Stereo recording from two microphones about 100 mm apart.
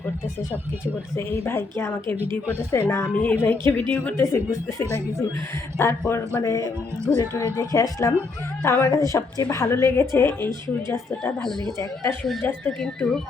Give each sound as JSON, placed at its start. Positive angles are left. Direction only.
{"t": 1.1, "sound": "a woman's voice", "side_deg": 25}
{"t": 4.2, "sound": "a woman's voice", "side_deg": 25}
{"t": 12.8, "sound": "speech", "side_deg": 5}